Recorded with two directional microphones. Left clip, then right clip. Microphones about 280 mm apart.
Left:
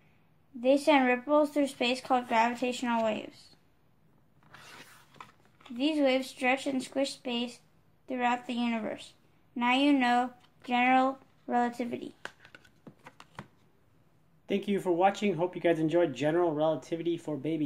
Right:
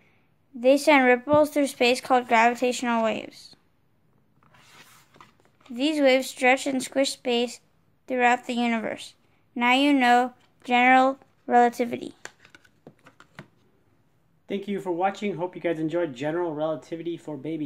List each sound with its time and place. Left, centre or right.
0.6 s speech: right
5.8 s a woman's voice: right
14.4 s speech: centre